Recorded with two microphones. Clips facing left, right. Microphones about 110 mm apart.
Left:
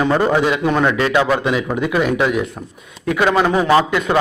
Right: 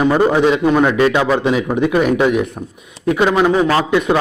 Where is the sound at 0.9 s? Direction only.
25° right (ahead or behind).